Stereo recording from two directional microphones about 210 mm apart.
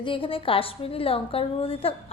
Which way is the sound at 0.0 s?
25° left (ahead or behind).